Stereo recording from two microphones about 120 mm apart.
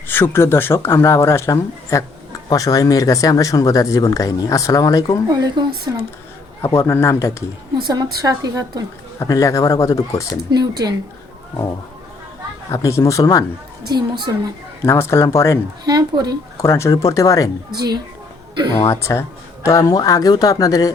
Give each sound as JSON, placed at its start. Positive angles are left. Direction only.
{"t": 0.1, "sound": "speech", "side_deg": 20}
{"t": 5.3, "sound": "speech", "side_deg": -35}
{"t": 6.6, "sound": "speech", "side_deg": 20}
{"t": 7.9, "sound": "speech", "side_deg": -30}
{"t": 9.1, "sound": "speech", "side_deg": 30}
{"t": 10.5, "sound": "speech", "side_deg": -35}
{"t": 12.7, "sound": "speech", "side_deg": 25}
{"t": 13.8, "sound": "speech", "side_deg": -35}
{"t": 14.8, "sound": "speech", "side_deg": 20}
{"t": 15.8, "sound": "speech", "side_deg": -35}
{"t": 16.6, "sound": "speech", "side_deg": 25}
{"t": 18.9, "sound": "speech", "side_deg": 25}